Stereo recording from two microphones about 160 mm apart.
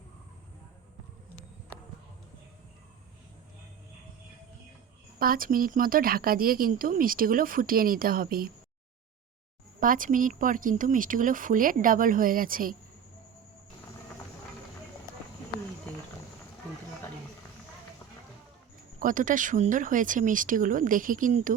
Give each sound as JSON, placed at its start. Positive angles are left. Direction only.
{"t": 5.2, "sound": "speech", "side_deg": -60}
{"t": 9.8, "sound": "speech", "side_deg": -60}
{"t": 15.9, "sound": "speech", "side_deg": 10}
{"t": 18.9, "sound": "speech", "side_deg": -55}